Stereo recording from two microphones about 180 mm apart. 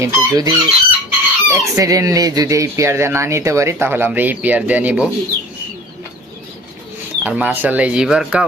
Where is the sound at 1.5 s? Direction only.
15° right (ahead or behind).